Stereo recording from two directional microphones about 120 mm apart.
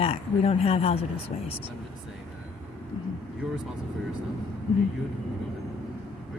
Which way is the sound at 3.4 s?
5° right (ahead or behind).